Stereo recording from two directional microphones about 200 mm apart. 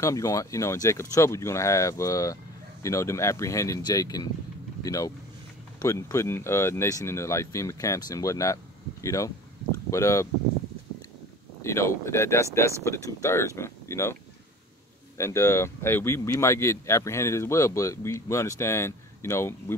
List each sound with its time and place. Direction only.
0.0 s speech: 15° left (ahead or behind)
11.6 s speech: 15° left (ahead or behind)
15.1 s speech: 15° left (ahead or behind)